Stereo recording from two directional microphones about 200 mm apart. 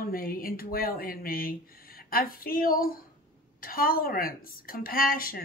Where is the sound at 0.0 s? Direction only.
45° left (ahead or behind).